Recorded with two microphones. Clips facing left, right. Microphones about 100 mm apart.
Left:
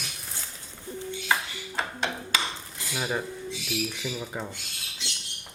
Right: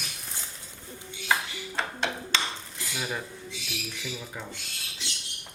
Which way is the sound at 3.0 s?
25° left (ahead or behind).